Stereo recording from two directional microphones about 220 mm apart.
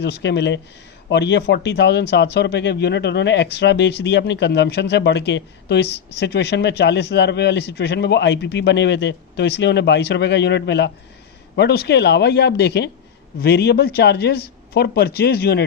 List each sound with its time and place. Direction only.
0.0 s speech: 50° left (ahead or behind)